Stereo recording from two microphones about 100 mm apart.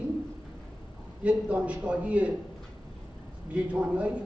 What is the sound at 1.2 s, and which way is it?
A man's voice, 15° right (ahead or behind).